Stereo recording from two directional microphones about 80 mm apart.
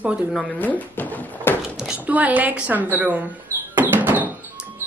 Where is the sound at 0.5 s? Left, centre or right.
Left.